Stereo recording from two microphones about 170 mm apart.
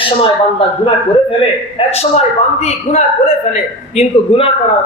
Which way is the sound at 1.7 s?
40° left (ahead or behind).